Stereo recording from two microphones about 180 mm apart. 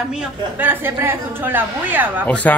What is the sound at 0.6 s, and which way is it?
A woman's voice, 10° right (ahead or behind).